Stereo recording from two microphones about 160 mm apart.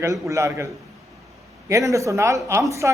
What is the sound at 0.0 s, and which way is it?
Speech, 20° right (ahead or behind).